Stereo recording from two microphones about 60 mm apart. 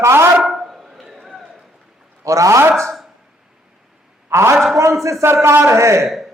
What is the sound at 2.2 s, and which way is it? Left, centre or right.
Speech, right.